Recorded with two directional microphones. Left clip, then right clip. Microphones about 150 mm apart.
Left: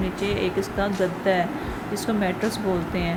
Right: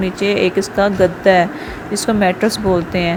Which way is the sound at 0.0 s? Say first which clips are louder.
Right 10 dB; 55° right (ahead or behind).